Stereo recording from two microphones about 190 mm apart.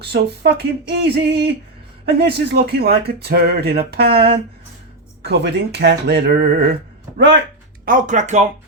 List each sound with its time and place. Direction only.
0.0 s speech: 60° right (ahead or behind)
5.2 s speech: 60° right (ahead or behind)
7.9 s speech: 45° right (ahead or behind)